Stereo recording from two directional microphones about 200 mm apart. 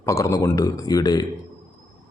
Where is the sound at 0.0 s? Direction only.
15° left (ahead or behind).